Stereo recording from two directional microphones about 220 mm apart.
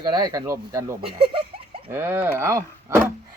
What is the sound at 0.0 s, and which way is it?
Speech, 20° right (ahead or behind).